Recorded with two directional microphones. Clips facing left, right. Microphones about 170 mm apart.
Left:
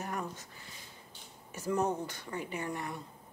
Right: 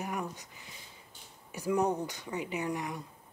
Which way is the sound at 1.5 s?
15° right (ahead or behind).